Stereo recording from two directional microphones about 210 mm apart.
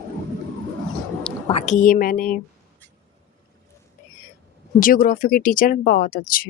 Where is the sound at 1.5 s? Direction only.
30° left (ahead or behind).